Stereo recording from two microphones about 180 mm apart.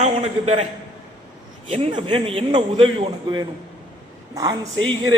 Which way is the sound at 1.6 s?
30° right (ahead or behind).